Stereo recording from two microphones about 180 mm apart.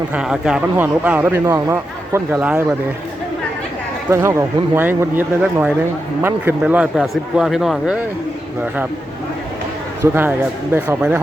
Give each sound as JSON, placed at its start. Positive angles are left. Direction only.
{"t": 0.1, "sound": "speech", "side_deg": -5}
{"t": 4.1, "sound": "a man's voice", "side_deg": -15}
{"t": 10.0, "sound": "speech", "side_deg": -10}